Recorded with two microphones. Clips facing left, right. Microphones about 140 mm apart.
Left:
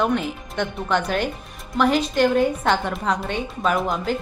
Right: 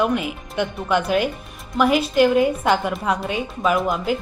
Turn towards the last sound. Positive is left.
turn(degrees=-10)  # may be behind; listen again after turning